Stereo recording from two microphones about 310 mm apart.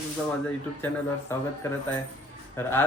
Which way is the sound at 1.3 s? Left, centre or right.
Centre.